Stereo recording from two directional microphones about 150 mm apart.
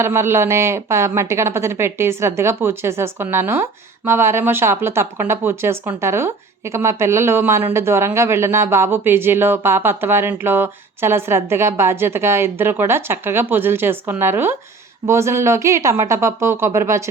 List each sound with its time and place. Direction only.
0.0 s speech: 15° right (ahead or behind)